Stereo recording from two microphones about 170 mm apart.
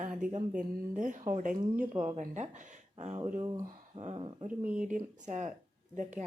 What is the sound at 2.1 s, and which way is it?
Speech, 45° right (ahead or behind).